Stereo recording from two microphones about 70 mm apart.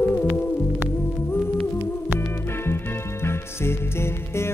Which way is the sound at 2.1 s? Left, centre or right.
Left.